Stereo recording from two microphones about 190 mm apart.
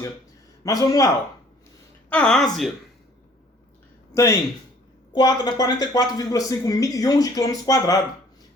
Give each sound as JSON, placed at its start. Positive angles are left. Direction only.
{"t": 0.6, "sound": "a man's voice", "side_deg": 20}
{"t": 2.0, "sound": "a woman's voice", "side_deg": 5}
{"t": 4.1, "sound": "speech", "side_deg": 15}